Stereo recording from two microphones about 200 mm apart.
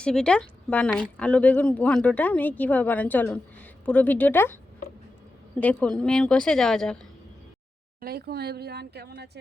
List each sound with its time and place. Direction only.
0.0 s a woman's voice: 5° left (ahead or behind)
5.5 s a woman's voice: 5° left (ahead or behind)
8.0 s speech: 50° right (ahead or behind)